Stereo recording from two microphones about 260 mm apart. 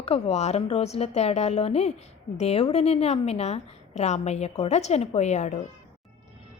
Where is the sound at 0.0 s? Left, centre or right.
Left.